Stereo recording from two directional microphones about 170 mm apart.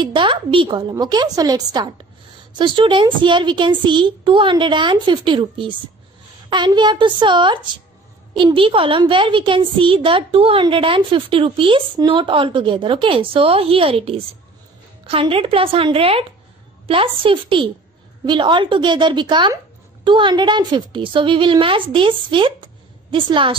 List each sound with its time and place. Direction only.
0.0 s a child's voice: 30° right (ahead or behind)